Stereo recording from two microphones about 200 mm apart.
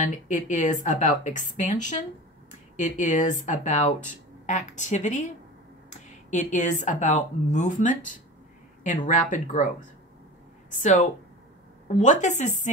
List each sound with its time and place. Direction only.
0.0 s speech: 40° left (ahead or behind)
6.3 s speech: 35° left (ahead or behind)
10.7 s speech: 40° left (ahead or behind)